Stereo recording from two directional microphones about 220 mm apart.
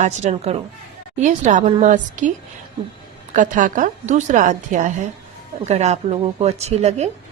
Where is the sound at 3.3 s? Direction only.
35° right (ahead or behind).